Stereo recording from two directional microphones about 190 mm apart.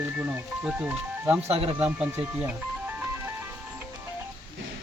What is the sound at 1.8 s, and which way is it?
Music, 5° right (ahead or behind).